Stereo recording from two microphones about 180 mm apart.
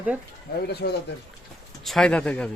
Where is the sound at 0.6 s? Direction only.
65° left (ahead or behind).